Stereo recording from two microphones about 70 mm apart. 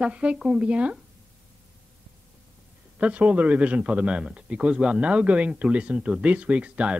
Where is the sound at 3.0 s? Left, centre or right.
Centre.